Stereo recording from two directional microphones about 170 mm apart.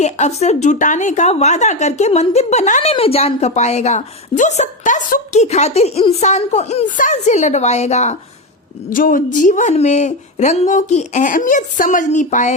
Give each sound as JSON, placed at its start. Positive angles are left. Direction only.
{"t": 0.0, "sound": "a woman's voice", "side_deg": 40}
{"t": 8.9, "sound": "speech", "side_deg": 55}